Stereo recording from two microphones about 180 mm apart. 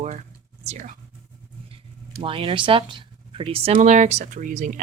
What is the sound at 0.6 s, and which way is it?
Speech, 40° right (ahead or behind).